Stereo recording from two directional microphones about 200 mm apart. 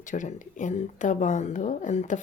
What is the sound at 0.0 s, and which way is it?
Speech, 40° left (ahead or behind).